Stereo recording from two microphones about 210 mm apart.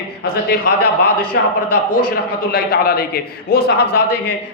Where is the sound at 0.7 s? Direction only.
40° left (ahead or behind).